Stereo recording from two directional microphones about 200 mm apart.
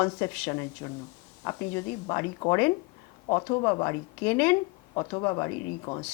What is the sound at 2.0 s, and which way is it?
A woman's voice, 20° left (ahead or behind).